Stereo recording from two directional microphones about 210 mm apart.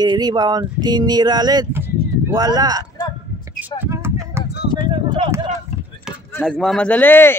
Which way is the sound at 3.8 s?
10° right (ahead or behind).